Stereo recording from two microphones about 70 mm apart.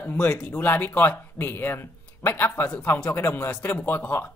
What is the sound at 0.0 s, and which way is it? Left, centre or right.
Speech, left.